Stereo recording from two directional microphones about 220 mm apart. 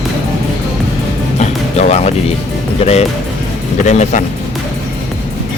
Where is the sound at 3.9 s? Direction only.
30° left (ahead or behind).